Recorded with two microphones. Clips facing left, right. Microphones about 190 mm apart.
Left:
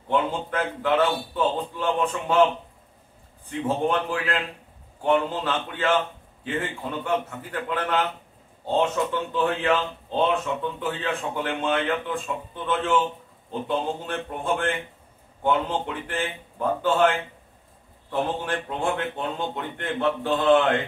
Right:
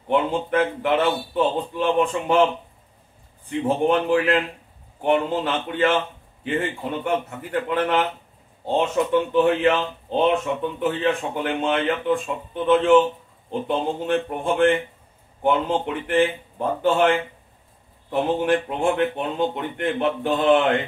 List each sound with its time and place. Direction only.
0.1 s speech: 20° right (ahead or behind)
3.4 s speech: 20° right (ahead or behind)
18.1 s speech: 20° right (ahead or behind)